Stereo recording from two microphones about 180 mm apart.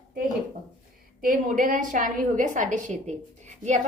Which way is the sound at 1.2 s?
50° right (ahead or behind).